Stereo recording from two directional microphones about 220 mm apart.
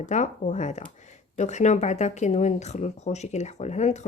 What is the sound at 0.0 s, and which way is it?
Speech, 35° left (ahead or behind).